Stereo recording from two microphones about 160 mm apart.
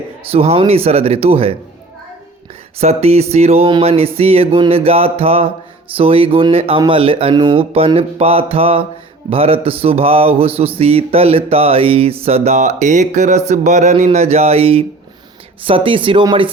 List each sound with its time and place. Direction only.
0.3 s speech: 40° right (ahead or behind)
2.8 s speech: 40° right (ahead or behind)